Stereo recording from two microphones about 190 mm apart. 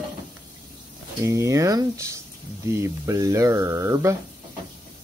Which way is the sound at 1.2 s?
15° right (ahead or behind).